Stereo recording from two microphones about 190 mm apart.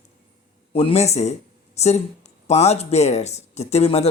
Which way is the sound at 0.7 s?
30° left (ahead or behind).